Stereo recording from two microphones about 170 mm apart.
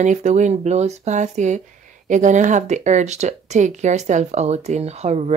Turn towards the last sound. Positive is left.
turn(degrees=-40)  # may be behind; listen again after turning